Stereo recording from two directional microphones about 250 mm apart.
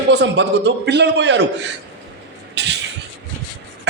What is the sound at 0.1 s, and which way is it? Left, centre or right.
A man's voice, right.